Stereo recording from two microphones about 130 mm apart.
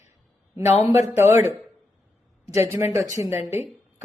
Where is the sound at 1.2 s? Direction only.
15° right (ahead or behind).